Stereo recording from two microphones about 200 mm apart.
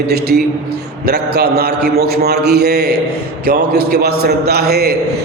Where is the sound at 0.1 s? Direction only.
50° right (ahead or behind).